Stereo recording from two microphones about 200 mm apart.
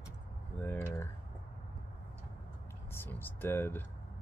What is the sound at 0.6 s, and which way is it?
Typing, 10° left (ahead or behind).